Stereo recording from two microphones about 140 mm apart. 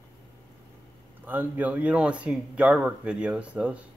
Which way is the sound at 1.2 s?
15° right (ahead or behind).